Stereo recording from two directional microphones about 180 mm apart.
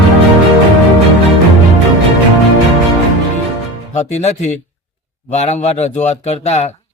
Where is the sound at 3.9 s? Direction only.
40° left (ahead or behind).